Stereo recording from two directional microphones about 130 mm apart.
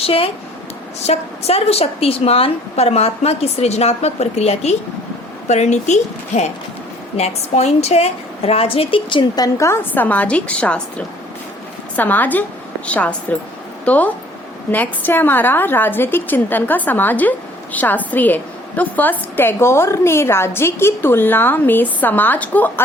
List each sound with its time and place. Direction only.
0.0 s a woman's voice: 45° left (ahead or behind); by 22.7 s 15° left (ahead or behind)